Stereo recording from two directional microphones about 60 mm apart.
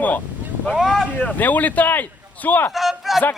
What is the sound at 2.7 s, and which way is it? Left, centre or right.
Speech, centre.